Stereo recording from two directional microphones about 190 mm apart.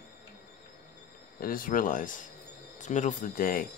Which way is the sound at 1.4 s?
50° left (ahead or behind).